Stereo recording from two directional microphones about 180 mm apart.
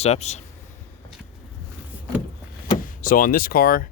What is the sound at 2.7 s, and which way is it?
Speech, 50° left (ahead or behind).